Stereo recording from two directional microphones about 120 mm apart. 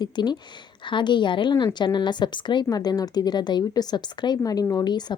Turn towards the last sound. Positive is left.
turn(degrees=35)  # may be behind; listen again after turning